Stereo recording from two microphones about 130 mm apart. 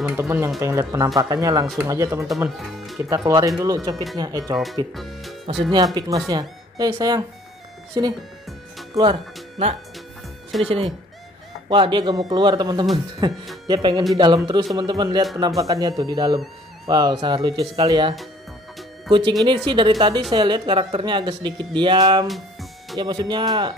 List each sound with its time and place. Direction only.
0.0 s speech: 15° right (ahead or behind)
2.2 s speech: centre (ahead or behind)
3.3 s speech: 25° right (ahead or behind)
3.9 s speech: centre (ahead or behind)
4.2 s speech: 30° right (ahead or behind)
4.9 s speech: centre (ahead or behind)
5.9 s speech: 30° right (ahead or behind)
10.6 s speech: 45° right (ahead or behind)
22.3 s music: centre (ahead or behind)
22.9 s speech: 35° right (ahead or behind)